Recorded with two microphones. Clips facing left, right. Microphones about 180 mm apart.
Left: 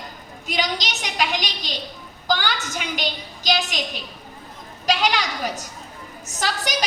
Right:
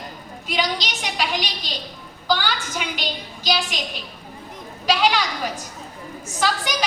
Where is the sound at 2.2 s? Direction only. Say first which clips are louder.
Right 1 dB; 45° left (ahead or behind).